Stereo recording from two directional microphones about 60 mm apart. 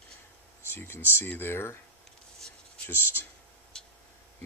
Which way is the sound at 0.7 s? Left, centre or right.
Left.